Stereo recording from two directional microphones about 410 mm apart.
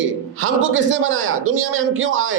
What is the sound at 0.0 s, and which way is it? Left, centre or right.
A man's voice, right.